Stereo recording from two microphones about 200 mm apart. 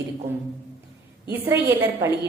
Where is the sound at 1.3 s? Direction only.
10° right (ahead or behind).